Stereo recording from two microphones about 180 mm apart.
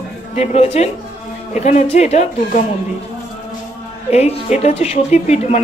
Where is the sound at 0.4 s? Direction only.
40° left (ahead or behind).